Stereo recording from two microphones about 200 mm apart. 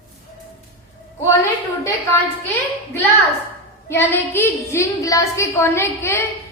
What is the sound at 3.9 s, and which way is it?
A woman's voice, 10° left (ahead or behind).